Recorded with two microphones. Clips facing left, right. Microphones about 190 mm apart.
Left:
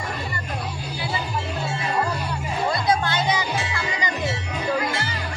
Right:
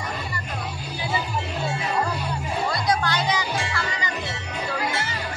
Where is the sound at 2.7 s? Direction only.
25° left (ahead or behind).